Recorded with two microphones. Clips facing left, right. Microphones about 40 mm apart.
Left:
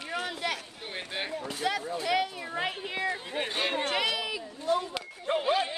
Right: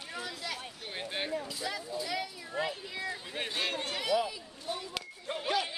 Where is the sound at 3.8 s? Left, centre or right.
Left.